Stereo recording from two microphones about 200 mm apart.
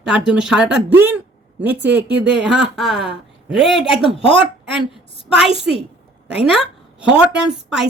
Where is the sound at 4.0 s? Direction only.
25° left (ahead or behind).